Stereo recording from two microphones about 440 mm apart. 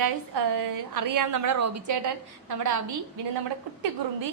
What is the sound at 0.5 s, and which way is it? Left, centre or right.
A woman's voice, right.